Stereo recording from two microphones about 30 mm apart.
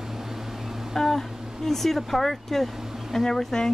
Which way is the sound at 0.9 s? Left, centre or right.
Centre.